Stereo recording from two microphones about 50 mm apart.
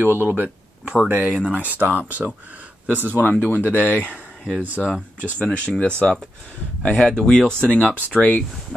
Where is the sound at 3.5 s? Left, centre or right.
Left.